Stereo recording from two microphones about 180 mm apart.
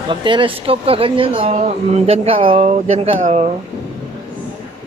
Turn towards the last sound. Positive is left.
turn(degrees=-35)  # may be behind; listen again after turning